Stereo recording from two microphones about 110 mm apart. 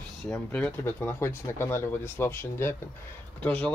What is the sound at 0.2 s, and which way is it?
Speech, 10° left (ahead or behind).